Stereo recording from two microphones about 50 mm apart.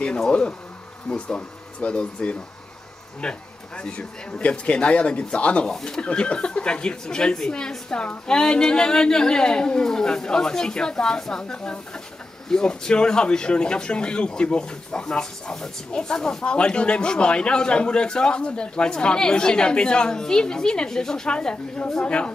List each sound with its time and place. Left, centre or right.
0.3 s speech: left
5.7 s speech: centre
5.9 s speech: left